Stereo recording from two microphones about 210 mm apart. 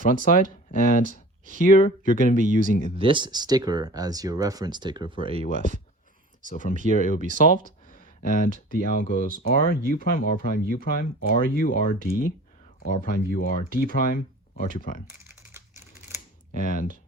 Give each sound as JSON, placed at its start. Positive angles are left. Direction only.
{"t": 0.0, "sound": "speech", "side_deg": 40}
{"t": 2.3, "sound": "speech", "side_deg": -35}
{"t": 3.0, "sound": "speech", "side_deg": -25}
{"t": 5.4, "sound": "speech", "side_deg": 40}
{"t": 16.5, "sound": "speech", "side_deg": 40}